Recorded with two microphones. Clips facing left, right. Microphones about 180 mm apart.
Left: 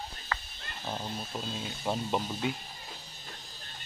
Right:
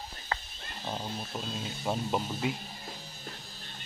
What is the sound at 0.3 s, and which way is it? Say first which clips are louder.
Roaring cats: right 2 dB; 30° right (ahead or behind).